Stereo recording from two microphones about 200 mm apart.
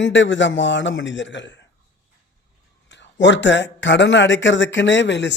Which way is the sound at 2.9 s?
65° left (ahead or behind).